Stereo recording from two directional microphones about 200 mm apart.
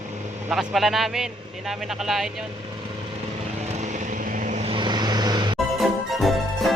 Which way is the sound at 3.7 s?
35° right (ahead or behind).